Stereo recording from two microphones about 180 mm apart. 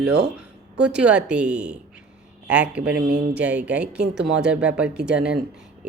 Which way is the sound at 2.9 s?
70° right (ahead or behind).